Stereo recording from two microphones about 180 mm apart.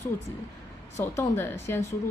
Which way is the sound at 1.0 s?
10° left (ahead or behind).